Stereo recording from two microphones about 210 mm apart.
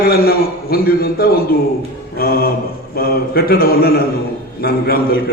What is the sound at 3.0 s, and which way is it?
A man's voice, 45° left (ahead or behind).